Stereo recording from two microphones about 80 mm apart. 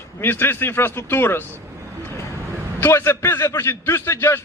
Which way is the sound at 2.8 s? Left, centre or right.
Left.